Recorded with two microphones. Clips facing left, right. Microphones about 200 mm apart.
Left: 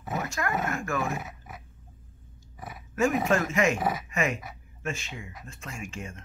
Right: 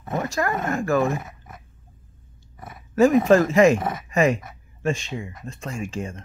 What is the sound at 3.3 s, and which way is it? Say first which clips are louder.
Speech: right 9 dB; 35° right (ahead or behind).